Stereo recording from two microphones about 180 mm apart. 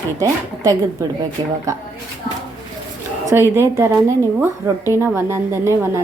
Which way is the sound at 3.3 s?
15° right (ahead or behind).